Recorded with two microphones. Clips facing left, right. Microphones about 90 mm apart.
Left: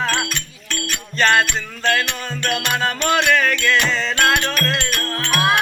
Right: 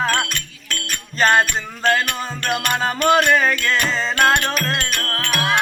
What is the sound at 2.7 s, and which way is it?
Music, 35° right (ahead or behind).